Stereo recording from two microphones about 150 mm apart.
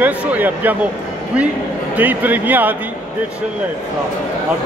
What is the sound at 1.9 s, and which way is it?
Speech, 10° right (ahead or behind).